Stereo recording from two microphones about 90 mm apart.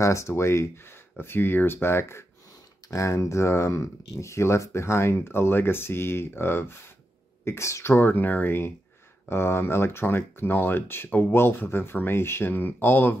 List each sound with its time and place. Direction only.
0.0 s speech: 30° left (ahead or behind)